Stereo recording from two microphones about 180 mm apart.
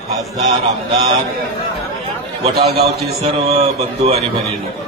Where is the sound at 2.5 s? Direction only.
60° right (ahead or behind).